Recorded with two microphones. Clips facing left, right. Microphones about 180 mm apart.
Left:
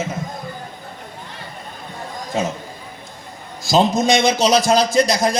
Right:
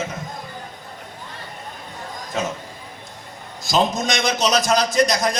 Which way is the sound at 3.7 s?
30° left (ahead or behind).